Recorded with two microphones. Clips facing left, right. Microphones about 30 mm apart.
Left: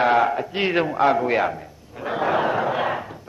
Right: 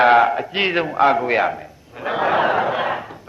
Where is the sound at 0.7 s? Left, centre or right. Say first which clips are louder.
Right 2 dB; centre.